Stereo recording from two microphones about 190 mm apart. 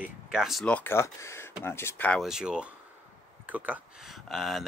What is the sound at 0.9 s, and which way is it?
Speech, 15° left (ahead or behind).